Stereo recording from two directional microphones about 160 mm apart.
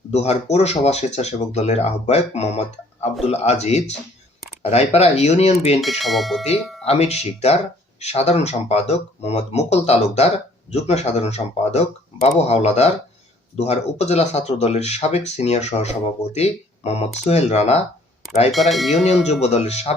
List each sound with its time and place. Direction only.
0.1 s speech: 45° left (ahead or behind)
5.8 s speech: centre (ahead or behind)
6.8 s speech: 40° left (ahead or behind)
18.5 s speech: centre (ahead or behind)
19.3 s speech: 45° left (ahead or behind)